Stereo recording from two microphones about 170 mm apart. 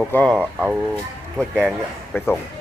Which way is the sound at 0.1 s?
5° left (ahead or behind).